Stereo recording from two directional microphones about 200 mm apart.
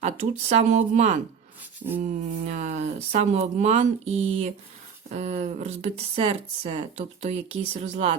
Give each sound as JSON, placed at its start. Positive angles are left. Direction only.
{"t": 0.0, "sound": "speech", "side_deg": -35}